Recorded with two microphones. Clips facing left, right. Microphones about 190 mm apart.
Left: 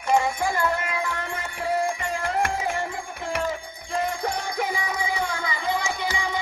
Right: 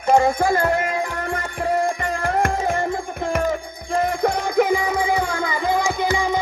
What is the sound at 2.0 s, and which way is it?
Music, 50° right (ahead or behind).